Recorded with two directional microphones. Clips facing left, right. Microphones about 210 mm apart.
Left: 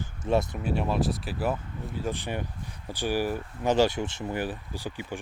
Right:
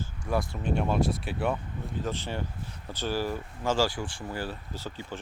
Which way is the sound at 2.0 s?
15° left (ahead or behind).